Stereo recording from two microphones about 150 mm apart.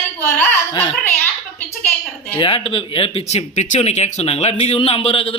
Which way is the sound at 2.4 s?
40° left (ahead or behind).